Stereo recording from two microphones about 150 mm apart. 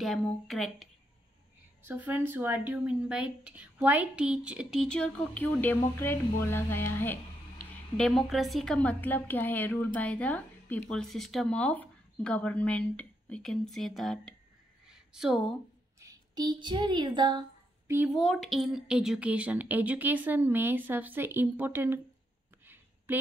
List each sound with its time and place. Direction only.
0.0 s speech: centre (ahead or behind)
1.8 s speech: 10° right (ahead or behind); by 7.2 s 15° left (ahead or behind)
8.0 s a woman's voice: centre (ahead or behind)
14.9 s a sound: 5° right (ahead or behind)
16.0 s a woman's voice: 25° right (ahead or behind)
17.9 s speech: 5° right (ahead or behind)
23.1 s a woman's voice: 15° right (ahead or behind)